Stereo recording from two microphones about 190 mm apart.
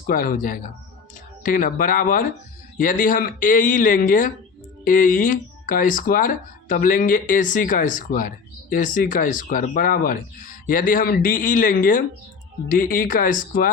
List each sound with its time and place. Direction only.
0.1 s speech: 45° left (ahead or behind)